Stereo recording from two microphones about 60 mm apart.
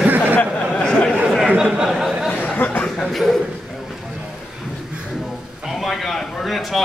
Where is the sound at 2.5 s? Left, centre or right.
Left.